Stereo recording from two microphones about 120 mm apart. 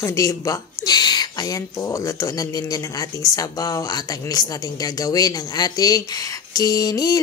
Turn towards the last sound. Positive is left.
turn(degrees=30)  # may be behind; listen again after turning